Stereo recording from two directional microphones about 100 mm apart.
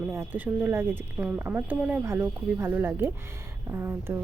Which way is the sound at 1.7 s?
5° right (ahead or behind).